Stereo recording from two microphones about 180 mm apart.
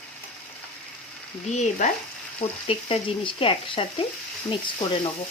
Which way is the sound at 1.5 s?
40° left (ahead or behind).